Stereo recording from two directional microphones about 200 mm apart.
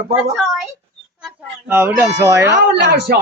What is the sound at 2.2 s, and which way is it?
Speech, 15° right (ahead or behind).